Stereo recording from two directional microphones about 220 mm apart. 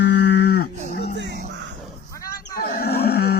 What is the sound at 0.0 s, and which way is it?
Livestock, 50° left (ahead or behind).